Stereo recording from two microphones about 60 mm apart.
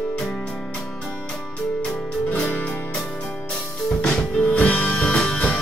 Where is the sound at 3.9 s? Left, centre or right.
Centre.